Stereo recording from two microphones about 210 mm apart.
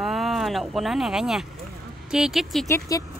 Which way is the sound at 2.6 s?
15° left (ahead or behind).